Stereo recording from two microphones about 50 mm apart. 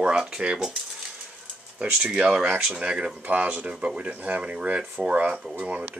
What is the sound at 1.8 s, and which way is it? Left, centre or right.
Speech, centre.